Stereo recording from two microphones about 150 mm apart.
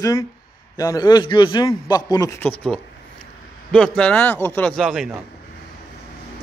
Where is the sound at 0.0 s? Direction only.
20° left (ahead or behind).